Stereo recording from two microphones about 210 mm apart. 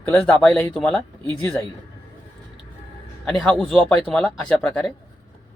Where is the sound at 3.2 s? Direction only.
5° left (ahead or behind).